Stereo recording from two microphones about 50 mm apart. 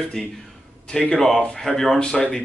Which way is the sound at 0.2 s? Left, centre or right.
Centre.